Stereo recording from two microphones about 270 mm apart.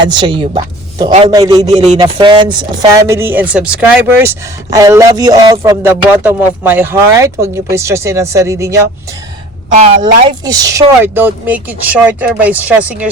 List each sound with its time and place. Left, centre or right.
0.1 s speech: centre
10.2 s speech: centre